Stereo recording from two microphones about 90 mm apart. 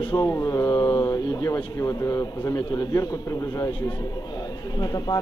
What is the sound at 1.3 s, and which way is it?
A man's voice, 40° left (ahead or behind).